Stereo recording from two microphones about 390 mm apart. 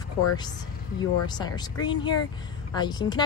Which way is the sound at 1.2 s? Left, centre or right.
Centre.